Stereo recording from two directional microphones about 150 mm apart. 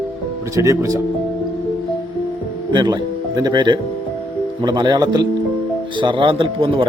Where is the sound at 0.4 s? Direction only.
20° right (ahead or behind).